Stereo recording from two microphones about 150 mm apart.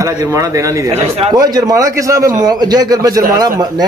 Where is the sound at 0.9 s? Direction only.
45° right (ahead or behind).